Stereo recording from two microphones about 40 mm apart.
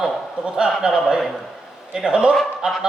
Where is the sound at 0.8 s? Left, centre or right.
Right.